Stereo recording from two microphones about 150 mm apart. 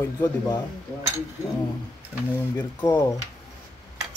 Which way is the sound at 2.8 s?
20° left (ahead or behind).